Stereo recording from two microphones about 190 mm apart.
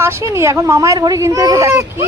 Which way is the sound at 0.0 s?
15° right (ahead or behind).